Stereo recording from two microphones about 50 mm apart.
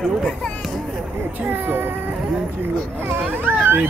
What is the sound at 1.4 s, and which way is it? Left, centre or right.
Speech, right.